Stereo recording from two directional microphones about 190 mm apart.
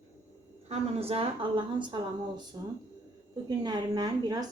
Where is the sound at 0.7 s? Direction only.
30° right (ahead or behind).